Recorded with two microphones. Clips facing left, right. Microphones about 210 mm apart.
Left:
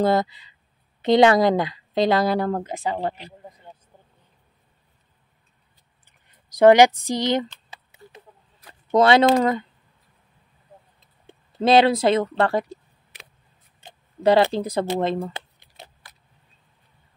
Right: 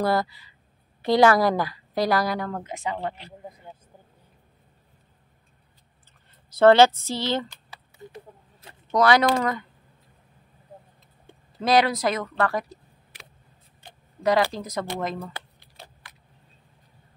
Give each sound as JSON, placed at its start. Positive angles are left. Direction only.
{"t": 0.0, "sound": "a woman's voice", "side_deg": 20}
{"t": 6.5, "sound": "speech", "side_deg": 15}
{"t": 8.0, "sound": "a sound", "side_deg": -20}
{"t": 8.9, "sound": "a woman's voice", "side_deg": 25}
{"t": 11.6, "sound": "speech", "side_deg": 25}
{"t": 13.7, "sound": "tick", "side_deg": 25}